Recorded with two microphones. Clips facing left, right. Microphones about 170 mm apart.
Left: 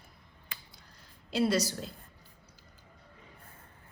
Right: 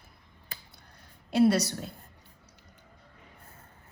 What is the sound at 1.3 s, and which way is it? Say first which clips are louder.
Speech: right 5 dB; 60° right (ahead or behind).